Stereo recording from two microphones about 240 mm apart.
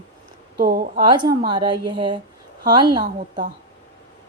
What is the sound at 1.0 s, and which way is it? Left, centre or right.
A woman's voice, centre.